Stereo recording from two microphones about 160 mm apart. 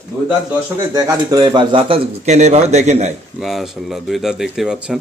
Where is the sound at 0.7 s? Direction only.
25° right (ahead or behind); by 3.1 s 45° right (ahead or behind).